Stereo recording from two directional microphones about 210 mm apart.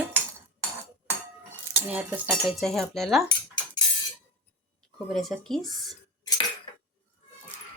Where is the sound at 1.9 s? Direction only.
10° right (ahead or behind).